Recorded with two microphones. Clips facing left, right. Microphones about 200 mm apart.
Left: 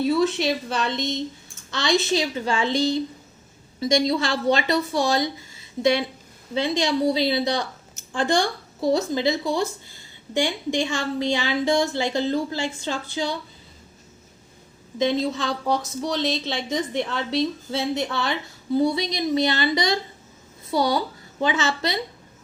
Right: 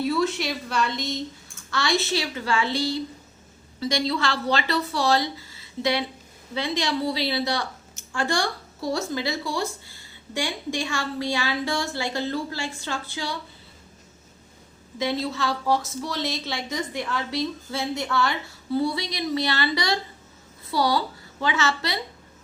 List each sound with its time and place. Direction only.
0.0 s a woman's voice: 20° left (ahead or behind)
14.9 s a woman's voice: 20° left (ahead or behind)